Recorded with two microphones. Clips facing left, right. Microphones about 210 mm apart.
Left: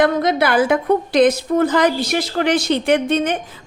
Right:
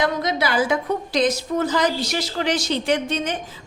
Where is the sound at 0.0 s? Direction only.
55° left (ahead or behind).